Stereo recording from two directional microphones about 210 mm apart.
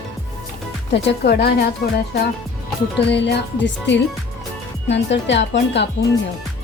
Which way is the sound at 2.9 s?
55° left (ahead or behind).